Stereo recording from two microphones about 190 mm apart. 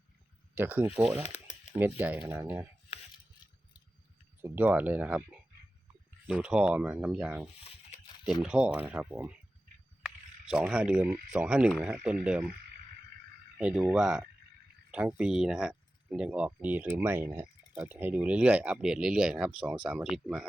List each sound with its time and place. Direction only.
0.5 s speech: 10° right (ahead or behind)
1.2 s a sound: 35° left (ahead or behind)
1.7 s speech: 10° right (ahead or behind)
4.4 s speech: 10° right (ahead or behind)
10.5 s speech: 5° right (ahead or behind)
13.6 s speech: 5° right (ahead or behind)